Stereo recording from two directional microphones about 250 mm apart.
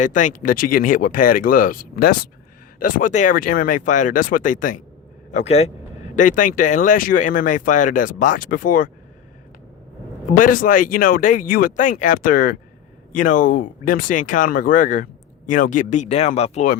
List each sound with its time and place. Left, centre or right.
0.0 s a man's voice: left
10.3 s speech: left